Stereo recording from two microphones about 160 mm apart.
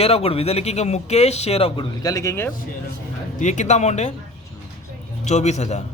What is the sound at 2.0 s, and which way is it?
Speech, 20° left (ahead or behind).